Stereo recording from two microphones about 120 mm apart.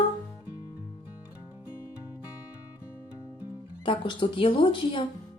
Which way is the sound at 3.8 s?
45° left (ahead or behind).